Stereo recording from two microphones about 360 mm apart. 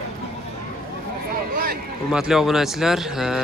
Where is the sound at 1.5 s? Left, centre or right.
Right.